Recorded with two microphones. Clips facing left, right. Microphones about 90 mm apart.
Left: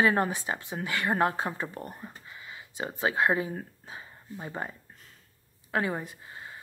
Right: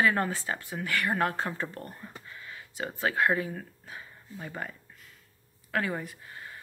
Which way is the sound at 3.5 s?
25° left (ahead or behind).